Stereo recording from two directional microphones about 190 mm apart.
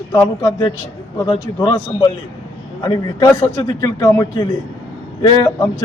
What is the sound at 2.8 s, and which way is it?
A man's voice, 20° left (ahead or behind).